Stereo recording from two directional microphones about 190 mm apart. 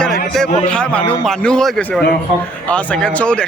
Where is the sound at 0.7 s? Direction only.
5° left (ahead or behind).